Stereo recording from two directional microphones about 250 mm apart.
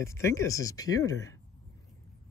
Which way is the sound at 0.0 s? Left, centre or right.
Centre.